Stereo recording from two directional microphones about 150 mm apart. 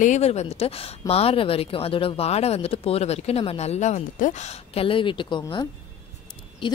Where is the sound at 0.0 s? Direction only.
50° left (ahead or behind).